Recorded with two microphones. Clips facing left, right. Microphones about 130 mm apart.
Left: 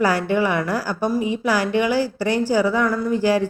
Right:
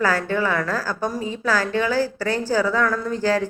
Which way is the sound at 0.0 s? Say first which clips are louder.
Left 2 dB; 15° left (ahead or behind).